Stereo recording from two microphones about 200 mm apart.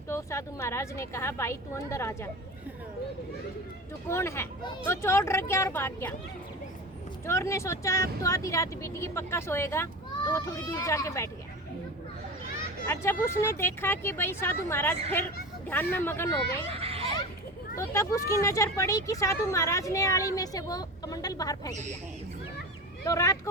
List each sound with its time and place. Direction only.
0.1 s speech: 15° left (ahead or behind)
4.1 s speech: 10° left (ahead or behind)
7.3 s speech: 15° left (ahead or behind)
12.9 s speech: 10° left (ahead or behind)
16.7 s a sound: 30° right (ahead or behind)
17.7 s speech: 15° left (ahead or behind)
23.0 s speech: 15° left (ahead or behind)